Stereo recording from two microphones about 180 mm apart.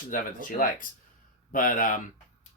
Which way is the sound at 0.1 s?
50° left (ahead or behind).